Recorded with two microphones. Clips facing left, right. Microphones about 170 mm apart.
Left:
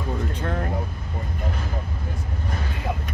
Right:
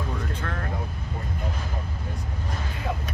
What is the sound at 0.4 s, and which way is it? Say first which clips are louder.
Vehicle: left 5 dB; 25° left (ahead or behind).